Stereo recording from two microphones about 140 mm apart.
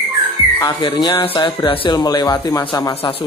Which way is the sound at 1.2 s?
35° left (ahead or behind).